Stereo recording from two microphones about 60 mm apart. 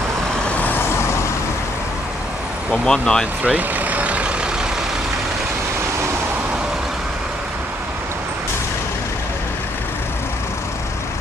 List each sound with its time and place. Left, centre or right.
0.6 s vehicle: left
2.7 s speech: centre
3.4 s vehicle: right